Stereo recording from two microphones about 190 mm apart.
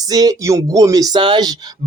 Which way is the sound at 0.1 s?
20° right (ahead or behind).